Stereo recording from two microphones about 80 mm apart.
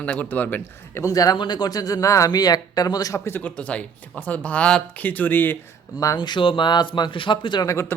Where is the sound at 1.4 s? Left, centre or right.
Left.